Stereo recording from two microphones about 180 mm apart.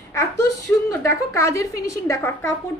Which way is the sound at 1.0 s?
15° left (ahead or behind).